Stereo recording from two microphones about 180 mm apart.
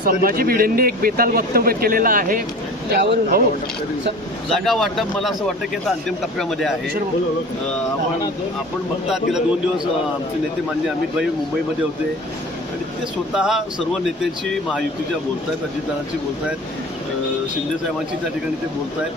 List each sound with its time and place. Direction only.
0.0 s a man's voice: 55° right (ahead or behind)
2.9 s speech: 65° right (ahead or behind)
4.4 s speech: centre (ahead or behind)
9.0 s speech: 5° right (ahead or behind)
13.3 s speech: 5° right (ahead or behind)